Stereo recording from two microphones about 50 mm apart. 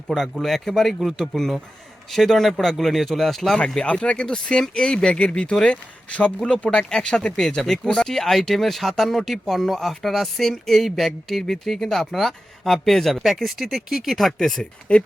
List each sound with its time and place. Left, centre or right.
0.1 s speech: centre
3.8 s speech: left; by 14.3 s centre
14.3 s speech: centre
14.9 s speech: left